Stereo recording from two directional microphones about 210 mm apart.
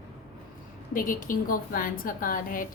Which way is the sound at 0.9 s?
40° left (ahead or behind).